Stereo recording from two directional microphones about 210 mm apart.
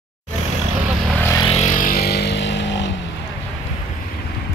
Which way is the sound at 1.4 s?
30° left (ahead or behind).